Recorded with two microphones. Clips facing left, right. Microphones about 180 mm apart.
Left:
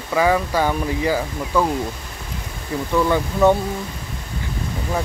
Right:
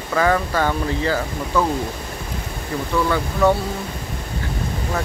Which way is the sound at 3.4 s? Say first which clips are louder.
Left 2 dB; 20° left (ahead or behind).